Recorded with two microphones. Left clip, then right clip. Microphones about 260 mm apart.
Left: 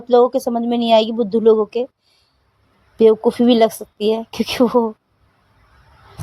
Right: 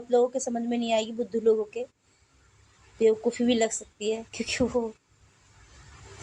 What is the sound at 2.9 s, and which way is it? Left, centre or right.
A woman's voice, left.